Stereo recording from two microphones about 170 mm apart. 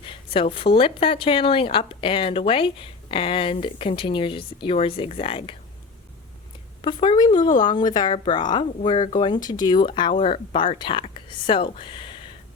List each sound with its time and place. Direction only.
0.5 s speech: 30° left (ahead or behind)
6.8 s speech: 30° left (ahead or behind)